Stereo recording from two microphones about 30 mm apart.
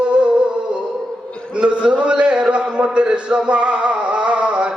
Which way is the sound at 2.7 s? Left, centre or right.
Right.